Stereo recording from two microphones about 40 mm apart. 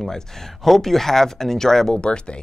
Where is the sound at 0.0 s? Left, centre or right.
Centre.